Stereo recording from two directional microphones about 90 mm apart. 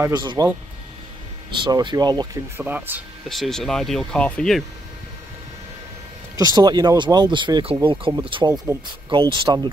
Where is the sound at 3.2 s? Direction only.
Centre (ahead or behind).